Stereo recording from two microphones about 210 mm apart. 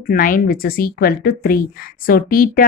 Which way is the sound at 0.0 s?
40° left (ahead or behind).